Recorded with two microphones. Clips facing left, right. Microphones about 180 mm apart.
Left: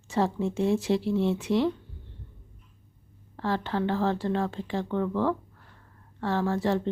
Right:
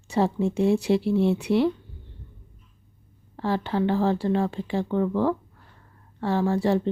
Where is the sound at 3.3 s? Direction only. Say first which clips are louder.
Right 3 dB; 15° right (ahead or behind).